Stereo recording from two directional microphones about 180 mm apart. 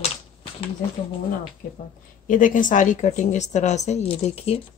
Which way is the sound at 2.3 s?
45° left (ahead or behind).